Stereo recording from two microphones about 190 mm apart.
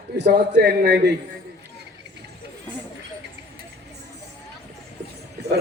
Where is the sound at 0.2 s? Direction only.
60° right (ahead or behind).